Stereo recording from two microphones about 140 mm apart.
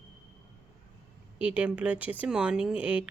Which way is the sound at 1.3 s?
10° right (ahead or behind).